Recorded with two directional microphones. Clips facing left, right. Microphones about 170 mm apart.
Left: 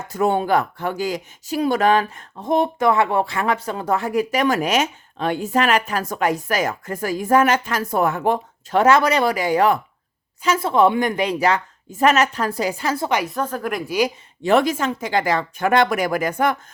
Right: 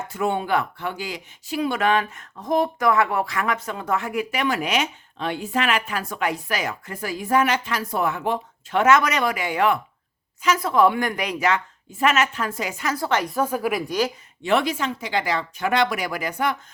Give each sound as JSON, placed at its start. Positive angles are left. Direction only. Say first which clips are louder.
{"t": 0.1, "sound": "speech", "louder": "left 5 dB", "side_deg": 40}
{"t": 13.1, "sound": "a woman's voice", "louder": "right 1 dB", "side_deg": 10}
{"t": 13.3, "sound": "speech", "louder": "right 1 dB", "side_deg": -10}
{"t": 14.4, "sound": "speech", "louder": "left 4 dB", "side_deg": 45}